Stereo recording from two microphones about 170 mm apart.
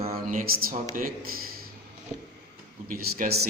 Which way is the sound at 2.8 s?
60° right (ahead or behind).